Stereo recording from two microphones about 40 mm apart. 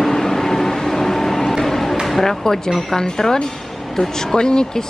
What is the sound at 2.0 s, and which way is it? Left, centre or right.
Music, centre.